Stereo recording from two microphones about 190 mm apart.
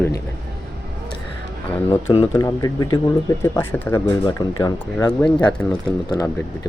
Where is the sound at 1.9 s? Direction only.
15° left (ahead or behind).